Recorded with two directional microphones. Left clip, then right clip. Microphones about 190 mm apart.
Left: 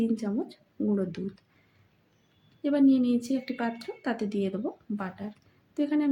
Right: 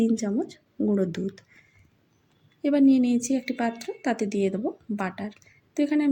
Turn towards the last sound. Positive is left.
turn(degrees=-15)  # may be behind; listen again after turning